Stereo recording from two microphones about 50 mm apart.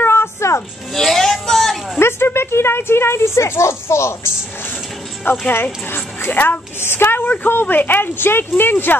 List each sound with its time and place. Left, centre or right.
0.0 s music: left
0.9 s a sound: centre
2.0 s speech: left
5.5 s speech: left
6.8 s a woman's voice: left